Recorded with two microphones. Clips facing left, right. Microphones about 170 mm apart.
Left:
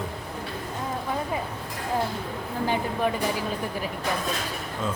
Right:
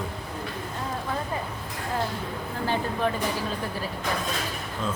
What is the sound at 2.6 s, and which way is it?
Speech, 15° left (ahead or behind).